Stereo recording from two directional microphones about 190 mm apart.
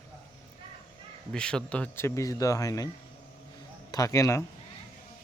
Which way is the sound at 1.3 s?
5° left (ahead or behind).